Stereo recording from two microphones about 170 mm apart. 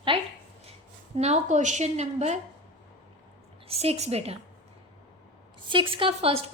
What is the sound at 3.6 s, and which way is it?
Speech, 35° right (ahead or behind).